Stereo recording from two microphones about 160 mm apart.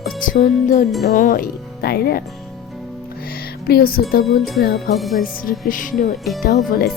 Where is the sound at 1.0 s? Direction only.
60° left (ahead or behind).